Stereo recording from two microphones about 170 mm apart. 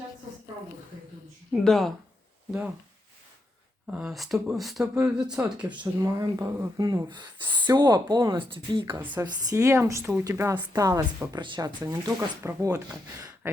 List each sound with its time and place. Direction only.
1.6 s speech: centre (ahead or behind)
3.9 s speech: centre (ahead or behind)
6.0 s speech: 20° right (ahead or behind)
9.0 s a woman's voice: 10° right (ahead or behind)
9.2 s speech: 20° right (ahead or behind)